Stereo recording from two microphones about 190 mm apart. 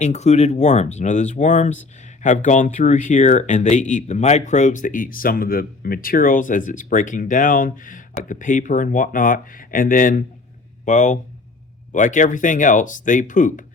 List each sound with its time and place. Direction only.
0.0 s speech: 35° left (ahead or behind)